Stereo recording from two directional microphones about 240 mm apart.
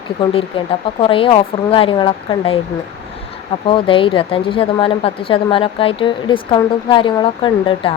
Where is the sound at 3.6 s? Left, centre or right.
Left.